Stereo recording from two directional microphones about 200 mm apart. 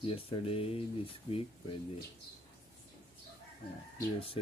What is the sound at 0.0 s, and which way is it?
Speech, 30° left (ahead or behind).